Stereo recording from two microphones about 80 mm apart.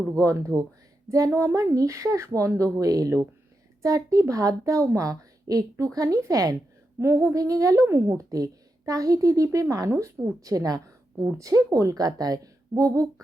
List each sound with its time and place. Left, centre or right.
0.1 s a woman's voice: right
7.0 s a woman's voice: right
7.8 s a woman's voice: right